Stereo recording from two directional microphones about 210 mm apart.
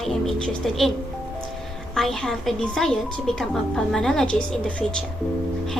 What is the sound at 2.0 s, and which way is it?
A woman's voice, centre (ahead or behind).